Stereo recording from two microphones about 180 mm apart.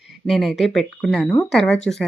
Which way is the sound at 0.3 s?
Centre (ahead or behind).